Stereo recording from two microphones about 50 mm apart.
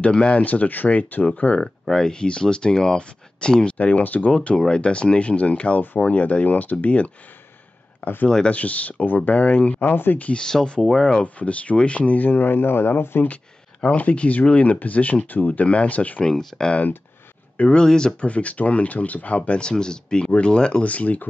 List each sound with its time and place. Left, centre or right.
0.0 s speech: left
1.6 s speech: centre; by 4.3 s left
4.3 s speech: centre
9.8 s speech: left
10.2 s speech: centre; by 13.3 s left
13.3 s speech: left
16.3 s speech: centre
17.7 s speech: centre
18.2 s speech: left
20.8 s speech: left